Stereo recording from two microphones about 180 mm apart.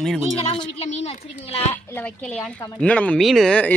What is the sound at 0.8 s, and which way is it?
Speech, 35° left (ahead or behind).